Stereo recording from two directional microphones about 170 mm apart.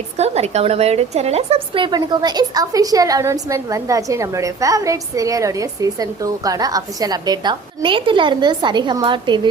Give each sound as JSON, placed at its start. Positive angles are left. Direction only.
{"t": 0.2, "sound": "a woman's voice", "side_deg": -40}